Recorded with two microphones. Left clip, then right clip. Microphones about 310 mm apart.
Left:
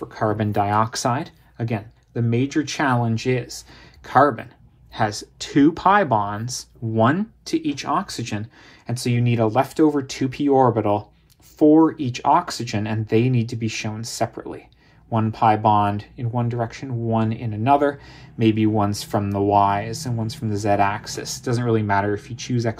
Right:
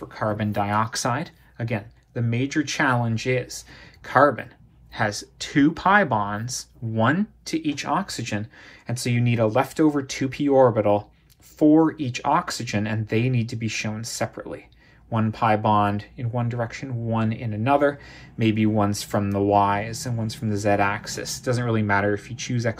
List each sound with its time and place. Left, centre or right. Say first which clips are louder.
0.1 s speech: left 3 dB; left